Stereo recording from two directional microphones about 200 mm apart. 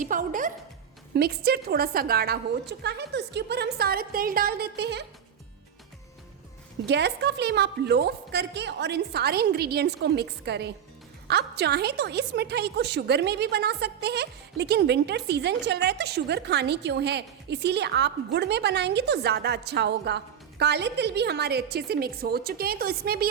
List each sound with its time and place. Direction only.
0.0 s music: 40° right (ahead or behind)
1.1 s a woman's voice: 50° right (ahead or behind)
6.8 s a woman's voice: 60° right (ahead or behind)